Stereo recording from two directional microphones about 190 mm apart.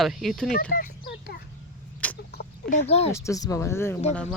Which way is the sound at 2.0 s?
10° left (ahead or behind).